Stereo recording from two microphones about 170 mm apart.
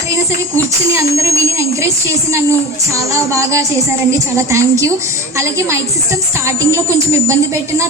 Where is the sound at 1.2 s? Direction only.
20° right (ahead or behind).